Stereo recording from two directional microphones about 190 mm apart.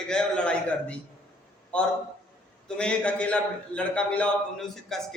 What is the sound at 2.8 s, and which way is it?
A man's voice, 5° left (ahead or behind).